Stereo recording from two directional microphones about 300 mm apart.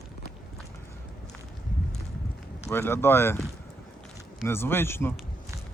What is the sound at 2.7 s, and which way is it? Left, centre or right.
Speech, centre.